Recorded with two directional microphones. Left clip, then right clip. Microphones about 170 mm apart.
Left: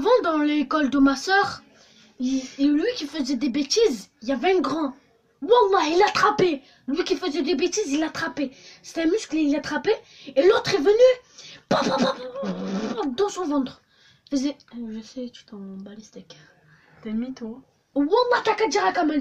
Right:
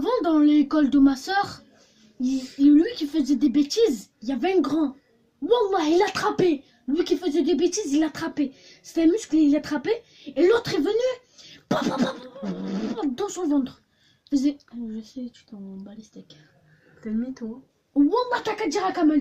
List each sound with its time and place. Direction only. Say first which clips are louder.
0.0 s a woman's voice: left 1 dB; 25° left (ahead or behind)
18.1 s speech: left 4 dB; 20° left (ahead or behind)